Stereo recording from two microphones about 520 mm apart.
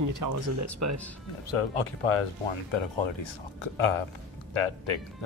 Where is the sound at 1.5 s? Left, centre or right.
Left.